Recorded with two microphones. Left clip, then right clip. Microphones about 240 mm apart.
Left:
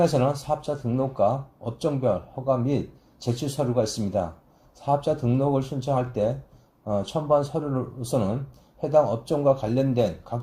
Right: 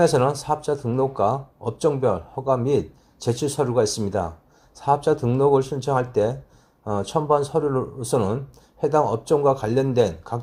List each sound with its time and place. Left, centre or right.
0.0 s speech: right